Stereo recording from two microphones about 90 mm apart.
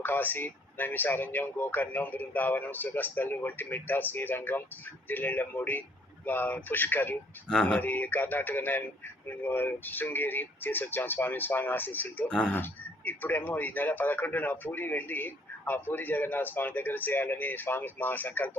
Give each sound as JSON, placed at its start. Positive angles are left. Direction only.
{"t": 0.0, "sound": "speech", "side_deg": 20}
{"t": 7.4, "sound": "speech", "side_deg": 10}
{"t": 7.9, "sound": "speech", "side_deg": 20}
{"t": 12.3, "sound": "speech", "side_deg": 10}
{"t": 13.1, "sound": "speech", "side_deg": 20}